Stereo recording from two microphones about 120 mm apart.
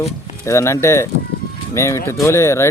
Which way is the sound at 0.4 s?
25° left (ahead or behind).